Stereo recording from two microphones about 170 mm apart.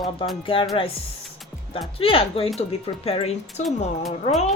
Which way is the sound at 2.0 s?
35° left (ahead or behind).